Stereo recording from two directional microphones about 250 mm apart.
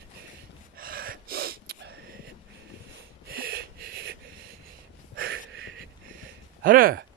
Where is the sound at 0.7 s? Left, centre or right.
Right.